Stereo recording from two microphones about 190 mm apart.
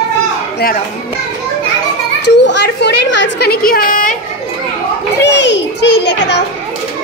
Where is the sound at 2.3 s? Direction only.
65° left (ahead or behind); by 4.2 s 45° left (ahead or behind).